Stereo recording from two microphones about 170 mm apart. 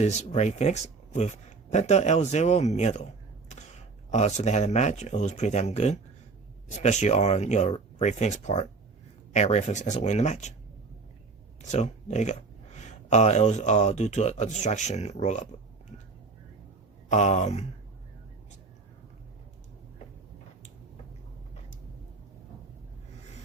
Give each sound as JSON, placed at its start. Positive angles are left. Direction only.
{"t": 0.0, "sound": "speech", "side_deg": 40}
{"t": 4.1, "sound": "speech", "side_deg": 45}
{"t": 11.6, "sound": "speech", "side_deg": 45}
{"t": 17.1, "sound": "speech", "side_deg": 45}